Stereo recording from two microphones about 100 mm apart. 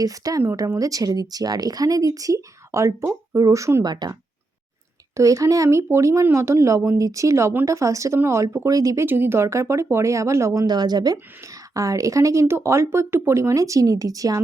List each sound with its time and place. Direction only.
0.0 s speech: 35° right (ahead or behind)
3.8 s a woman's voice: 45° right (ahead or behind)
9.0 s speech: 20° right (ahead or behind)